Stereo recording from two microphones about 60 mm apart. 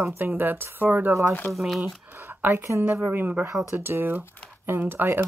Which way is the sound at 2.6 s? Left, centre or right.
Right.